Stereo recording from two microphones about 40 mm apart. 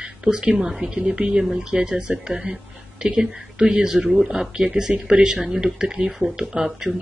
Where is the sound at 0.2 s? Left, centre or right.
Right.